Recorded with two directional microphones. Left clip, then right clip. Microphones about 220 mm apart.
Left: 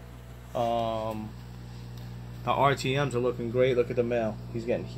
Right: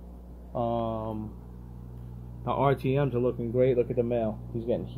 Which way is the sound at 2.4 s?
5° right (ahead or behind).